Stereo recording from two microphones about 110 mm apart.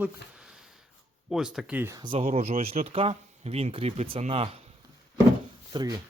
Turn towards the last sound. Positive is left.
turn(degrees=-40)  # may be behind; listen again after turning